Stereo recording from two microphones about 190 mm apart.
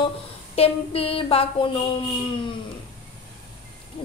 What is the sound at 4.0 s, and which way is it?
Hoot, 30° left (ahead or behind).